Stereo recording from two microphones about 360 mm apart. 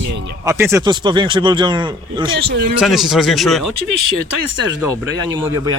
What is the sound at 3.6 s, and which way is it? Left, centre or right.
Speech, right.